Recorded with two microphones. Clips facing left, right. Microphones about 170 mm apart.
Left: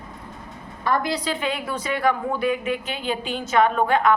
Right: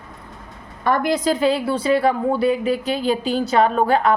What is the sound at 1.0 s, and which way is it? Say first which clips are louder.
A woman's voice: right 7 dB; 45° right (ahead or behind).